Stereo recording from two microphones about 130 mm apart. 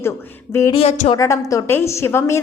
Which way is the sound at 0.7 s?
50° left (ahead or behind).